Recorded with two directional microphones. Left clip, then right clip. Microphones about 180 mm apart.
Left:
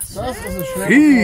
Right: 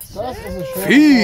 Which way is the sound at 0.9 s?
35° right (ahead or behind).